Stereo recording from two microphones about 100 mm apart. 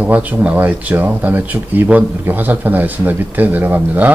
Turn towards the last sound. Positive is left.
turn(degrees=-15)  # may be behind; listen again after turning